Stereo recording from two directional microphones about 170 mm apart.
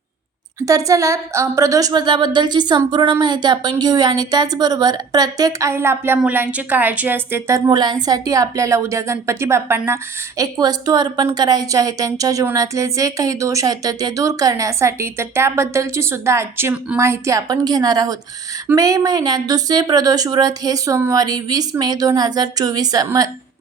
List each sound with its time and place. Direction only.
0.6 s a woman's voice: 20° right (ahead or behind)